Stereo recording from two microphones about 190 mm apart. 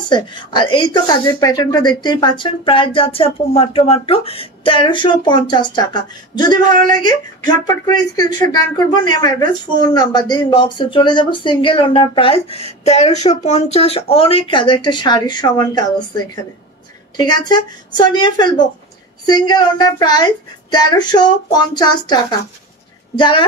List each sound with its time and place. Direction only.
0.1 s speech: 25° left (ahead or behind)
17.2 s speech: 20° left (ahead or behind)